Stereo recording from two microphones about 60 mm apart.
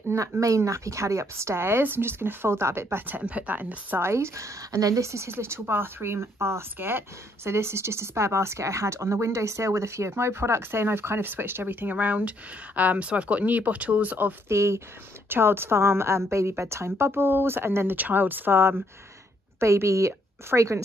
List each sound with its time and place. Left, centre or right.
0.1 s speech: right
3.1 s speech: right
4.0 s speech: right
4.7 s speech: right
5.0 s speech: right
7.5 s speech: right
14.5 s speech: right
15.2 s a woman's voice: right
19.6 s speech: right